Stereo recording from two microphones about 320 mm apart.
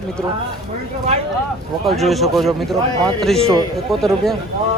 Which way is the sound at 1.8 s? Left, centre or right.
Centre.